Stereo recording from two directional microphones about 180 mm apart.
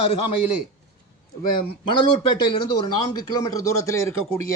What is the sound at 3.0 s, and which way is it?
Speech, 20° left (ahead or behind).